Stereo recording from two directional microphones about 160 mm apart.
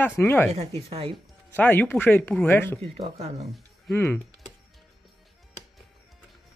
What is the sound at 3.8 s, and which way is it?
Speech, 10° left (ahead or behind).